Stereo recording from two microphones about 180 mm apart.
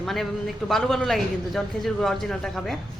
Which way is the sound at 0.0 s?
Centre (ahead or behind).